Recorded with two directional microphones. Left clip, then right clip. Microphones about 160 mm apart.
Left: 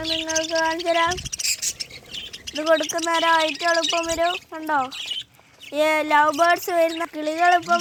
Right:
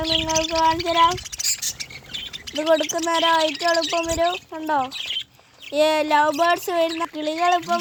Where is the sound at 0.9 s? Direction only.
15° right (ahead or behind).